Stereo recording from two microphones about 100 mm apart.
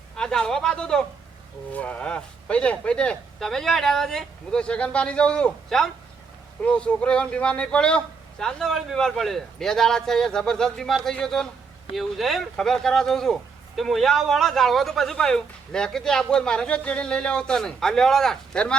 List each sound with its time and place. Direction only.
0.2 s speech: 5° left (ahead or behind)